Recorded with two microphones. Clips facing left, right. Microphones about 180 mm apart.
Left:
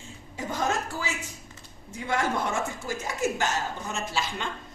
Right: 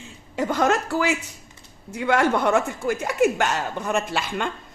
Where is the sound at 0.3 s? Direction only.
75° right (ahead or behind).